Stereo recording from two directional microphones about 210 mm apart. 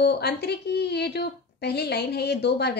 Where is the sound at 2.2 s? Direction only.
50° left (ahead or behind).